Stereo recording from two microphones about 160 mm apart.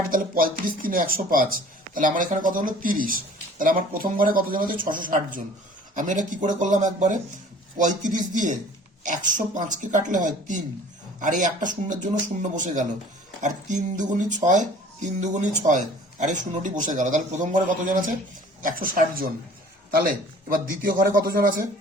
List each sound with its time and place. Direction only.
0.1 s speech: 60° right (ahead or behind)